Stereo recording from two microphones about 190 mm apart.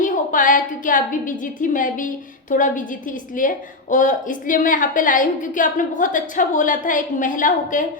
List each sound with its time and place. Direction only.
0.0 s a woman's voice: 45° left (ahead or behind)